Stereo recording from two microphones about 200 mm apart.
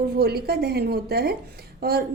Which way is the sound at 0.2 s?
50° right (ahead or behind).